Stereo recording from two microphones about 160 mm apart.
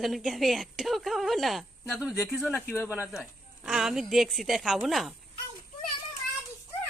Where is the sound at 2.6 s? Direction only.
15° left (ahead or behind).